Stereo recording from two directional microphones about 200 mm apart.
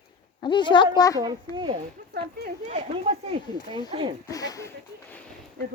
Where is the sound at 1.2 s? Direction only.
20° right (ahead or behind).